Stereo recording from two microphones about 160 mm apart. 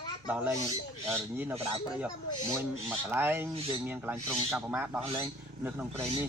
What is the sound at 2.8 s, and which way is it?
Speech, 15° right (ahead or behind).